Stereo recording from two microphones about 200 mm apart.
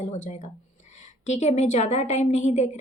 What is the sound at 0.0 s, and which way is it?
A woman's voice, 35° left (ahead or behind).